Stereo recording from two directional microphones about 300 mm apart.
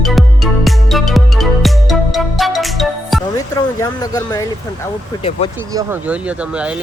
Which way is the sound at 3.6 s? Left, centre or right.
Centre.